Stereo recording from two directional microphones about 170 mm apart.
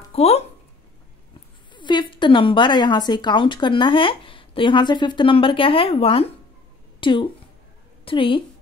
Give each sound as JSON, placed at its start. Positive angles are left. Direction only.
{"t": 0.1, "sound": "speech", "side_deg": 40}
{"t": 1.7, "sound": "a woman's voice", "side_deg": 25}